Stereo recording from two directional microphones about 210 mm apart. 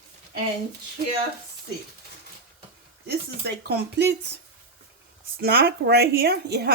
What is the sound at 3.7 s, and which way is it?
Speech, 50° right (ahead or behind).